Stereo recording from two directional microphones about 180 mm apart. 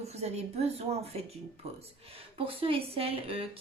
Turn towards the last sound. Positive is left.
turn(degrees=-30)  # may be behind; listen again after turning